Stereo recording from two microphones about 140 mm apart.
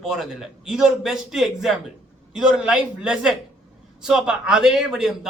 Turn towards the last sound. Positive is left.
turn(degrees=-5)  # may be behind; listen again after turning